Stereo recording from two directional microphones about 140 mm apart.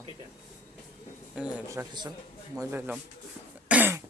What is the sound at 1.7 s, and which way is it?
Speech, 25° right (ahead or behind).